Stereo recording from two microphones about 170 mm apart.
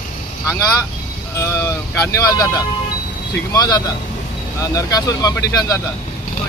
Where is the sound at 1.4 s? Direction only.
15° left (ahead or behind).